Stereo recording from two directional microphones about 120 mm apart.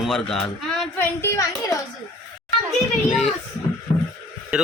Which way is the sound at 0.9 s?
25° left (ahead or behind).